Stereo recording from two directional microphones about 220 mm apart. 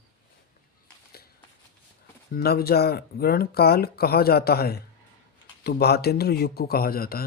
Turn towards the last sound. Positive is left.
turn(degrees=45)  # may be behind; listen again after turning